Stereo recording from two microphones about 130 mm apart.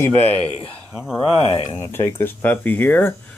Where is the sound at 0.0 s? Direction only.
15° left (ahead or behind).